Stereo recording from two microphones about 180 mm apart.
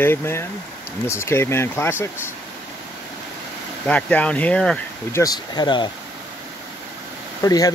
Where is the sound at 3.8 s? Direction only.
5° left (ahead or behind).